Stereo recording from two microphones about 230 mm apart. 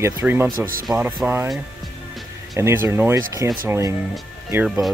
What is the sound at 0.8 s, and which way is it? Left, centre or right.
Speech, centre.